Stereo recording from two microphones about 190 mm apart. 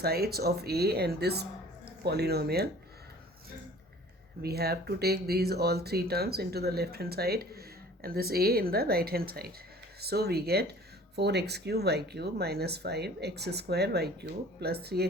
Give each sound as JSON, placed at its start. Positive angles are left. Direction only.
{"t": 0.0, "sound": "speech", "side_deg": -55}
{"t": 4.4, "sound": "speech", "side_deg": -55}